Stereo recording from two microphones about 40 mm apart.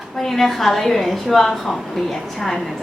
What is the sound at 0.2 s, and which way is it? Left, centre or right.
A woman's voice, centre.